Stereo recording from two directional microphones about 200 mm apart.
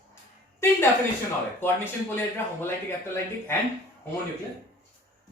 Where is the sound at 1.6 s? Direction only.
10° left (ahead or behind).